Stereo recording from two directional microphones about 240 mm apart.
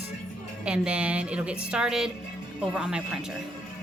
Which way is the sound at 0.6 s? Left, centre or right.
Centre.